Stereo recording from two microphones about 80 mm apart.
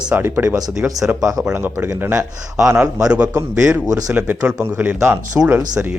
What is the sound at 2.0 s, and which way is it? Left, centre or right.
Speech, right.